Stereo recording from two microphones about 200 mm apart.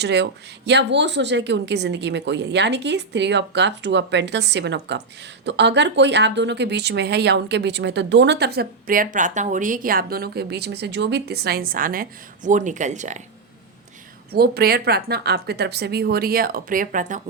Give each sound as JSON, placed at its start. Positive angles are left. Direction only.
{"t": 0.0, "sound": "speech", "side_deg": -55}
{"t": 14.3, "sound": "speech", "side_deg": -50}